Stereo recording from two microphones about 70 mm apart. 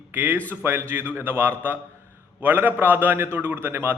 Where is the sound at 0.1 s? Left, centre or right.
Right.